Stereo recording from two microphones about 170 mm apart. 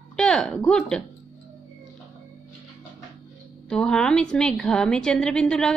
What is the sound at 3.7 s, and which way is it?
A woman's voice, 5° left (ahead or behind).